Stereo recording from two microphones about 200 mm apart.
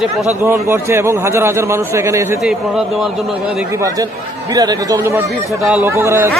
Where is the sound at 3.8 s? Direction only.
15° right (ahead or behind).